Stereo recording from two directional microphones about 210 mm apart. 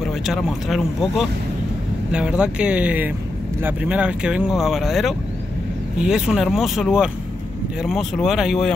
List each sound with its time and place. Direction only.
0.0 s speech: centre (ahead or behind)